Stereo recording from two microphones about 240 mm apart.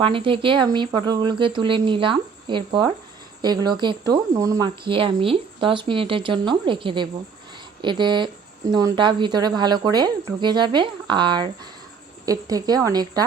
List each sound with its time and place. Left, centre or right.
0.0 s speech: right